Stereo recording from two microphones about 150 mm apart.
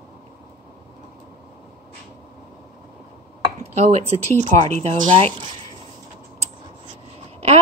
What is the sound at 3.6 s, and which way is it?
A woman's voice, 45° right (ahead or behind).